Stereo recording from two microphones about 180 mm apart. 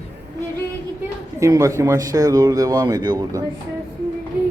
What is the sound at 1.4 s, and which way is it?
Speech, 15° right (ahead or behind).